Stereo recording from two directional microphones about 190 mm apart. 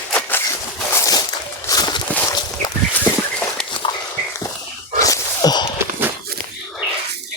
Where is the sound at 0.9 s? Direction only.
20° left (ahead or behind).